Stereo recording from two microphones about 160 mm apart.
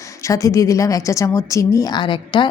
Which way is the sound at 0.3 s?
20° left (ahead or behind).